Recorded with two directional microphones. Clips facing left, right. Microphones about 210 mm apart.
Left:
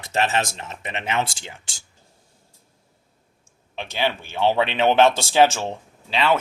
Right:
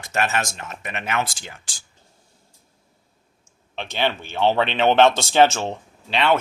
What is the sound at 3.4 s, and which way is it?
Speech, 10° left (ahead or behind).